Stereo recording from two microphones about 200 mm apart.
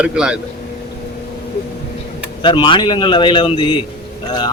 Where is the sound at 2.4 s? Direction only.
25° left (ahead or behind).